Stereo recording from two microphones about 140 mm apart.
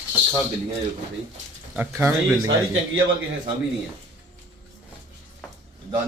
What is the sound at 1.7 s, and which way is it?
Speech, 15° right (ahead or behind).